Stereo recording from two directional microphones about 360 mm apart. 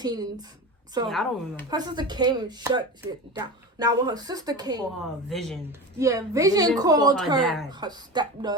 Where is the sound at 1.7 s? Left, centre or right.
Centre.